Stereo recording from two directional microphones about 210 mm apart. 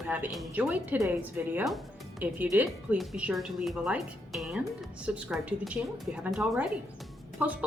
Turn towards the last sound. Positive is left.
turn(degrees=-5)  # may be behind; listen again after turning